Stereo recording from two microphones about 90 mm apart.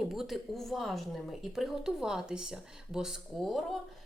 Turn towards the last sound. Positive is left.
turn(degrees=0)  # may be behind; listen again after turning